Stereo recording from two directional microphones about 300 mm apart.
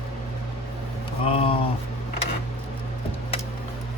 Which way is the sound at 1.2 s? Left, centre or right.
Centre.